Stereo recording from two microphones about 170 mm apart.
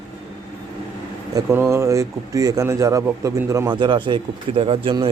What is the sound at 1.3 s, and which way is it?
A man's voice, 20° right (ahead or behind).